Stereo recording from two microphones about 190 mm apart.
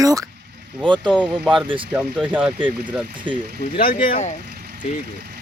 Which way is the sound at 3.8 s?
50° left (ahead or behind).